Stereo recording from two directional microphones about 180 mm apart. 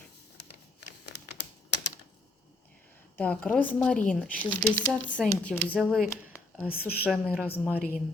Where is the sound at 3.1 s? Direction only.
5° left (ahead or behind).